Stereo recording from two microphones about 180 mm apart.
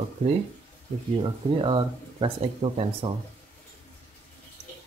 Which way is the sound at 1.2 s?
30° right (ahead or behind).